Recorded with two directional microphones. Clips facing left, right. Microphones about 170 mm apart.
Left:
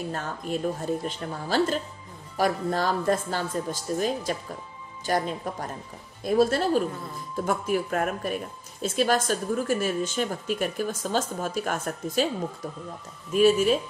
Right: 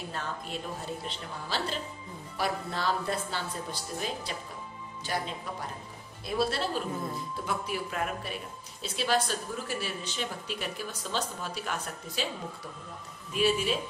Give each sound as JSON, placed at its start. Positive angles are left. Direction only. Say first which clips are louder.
{"t": 0.1, "sound": "speech", "louder": "left 6 dB", "side_deg": 45}
{"t": 13.3, "sound": "speech", "louder": "left 8 dB", "side_deg": 45}